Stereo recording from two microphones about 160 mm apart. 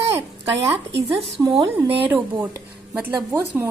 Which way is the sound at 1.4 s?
25° right (ahead or behind).